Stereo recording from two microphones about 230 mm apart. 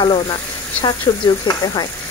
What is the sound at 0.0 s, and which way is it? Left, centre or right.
Speech, centre.